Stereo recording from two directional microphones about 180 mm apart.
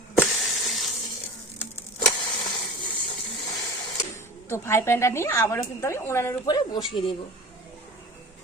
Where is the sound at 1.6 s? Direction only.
15° left (ahead or behind).